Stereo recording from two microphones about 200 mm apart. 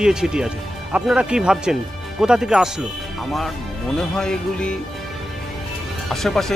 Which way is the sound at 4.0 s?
5° left (ahead or behind).